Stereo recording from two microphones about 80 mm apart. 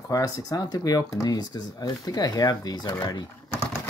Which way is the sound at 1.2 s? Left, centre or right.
Left.